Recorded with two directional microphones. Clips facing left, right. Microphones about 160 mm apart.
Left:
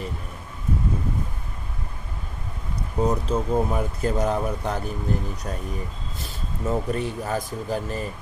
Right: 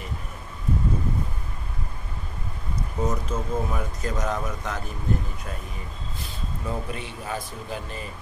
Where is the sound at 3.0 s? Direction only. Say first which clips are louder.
Left 5 dB; 35° left (ahead or behind).